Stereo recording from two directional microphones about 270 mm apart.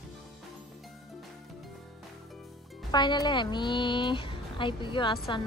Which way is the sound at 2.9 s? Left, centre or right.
Centre.